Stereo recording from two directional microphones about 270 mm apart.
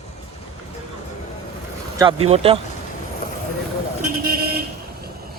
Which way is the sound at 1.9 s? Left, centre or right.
Centre.